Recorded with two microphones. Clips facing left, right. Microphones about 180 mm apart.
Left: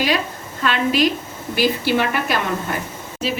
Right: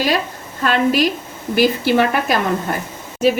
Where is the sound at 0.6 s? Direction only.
45° right (ahead or behind).